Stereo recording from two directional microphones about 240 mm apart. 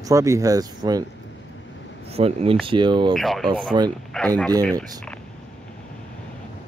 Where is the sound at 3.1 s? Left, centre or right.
Centre.